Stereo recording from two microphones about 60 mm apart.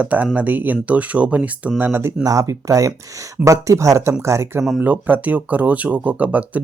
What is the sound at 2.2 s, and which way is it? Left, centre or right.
Speech, right.